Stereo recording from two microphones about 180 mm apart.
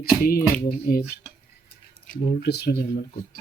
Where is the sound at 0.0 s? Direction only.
55° left (ahead or behind).